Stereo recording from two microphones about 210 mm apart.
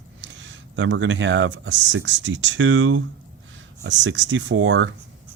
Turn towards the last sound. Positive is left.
turn(degrees=-65)  # may be behind; listen again after turning